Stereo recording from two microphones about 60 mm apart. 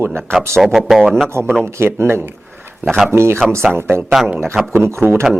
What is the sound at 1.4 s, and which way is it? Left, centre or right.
Speech, right.